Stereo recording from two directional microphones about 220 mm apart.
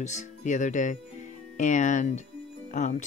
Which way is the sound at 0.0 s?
35° left (ahead or behind).